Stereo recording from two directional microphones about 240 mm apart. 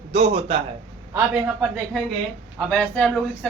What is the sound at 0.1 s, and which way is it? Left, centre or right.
Speech, right.